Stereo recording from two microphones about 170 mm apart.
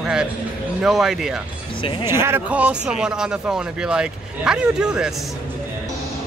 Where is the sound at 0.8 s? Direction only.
Centre (ahead or behind).